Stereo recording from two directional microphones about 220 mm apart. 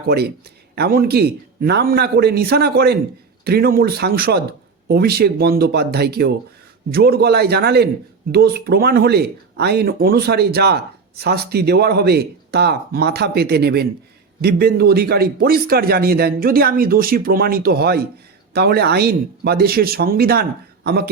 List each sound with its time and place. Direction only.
0.8 s a man's voice: 45° right (ahead or behind)